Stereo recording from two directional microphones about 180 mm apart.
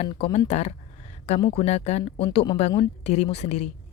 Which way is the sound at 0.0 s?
35° left (ahead or behind).